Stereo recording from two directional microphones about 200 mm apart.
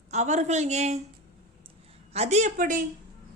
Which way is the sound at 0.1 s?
35° right (ahead or behind).